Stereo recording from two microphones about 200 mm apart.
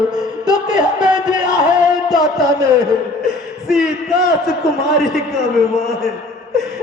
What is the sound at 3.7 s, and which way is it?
Music, centre (ahead or behind).